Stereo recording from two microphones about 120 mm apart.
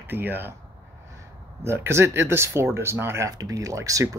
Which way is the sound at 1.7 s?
20° right (ahead or behind).